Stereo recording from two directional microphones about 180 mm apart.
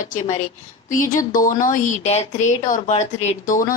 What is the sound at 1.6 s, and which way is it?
A woman's voice, 45° left (ahead or behind).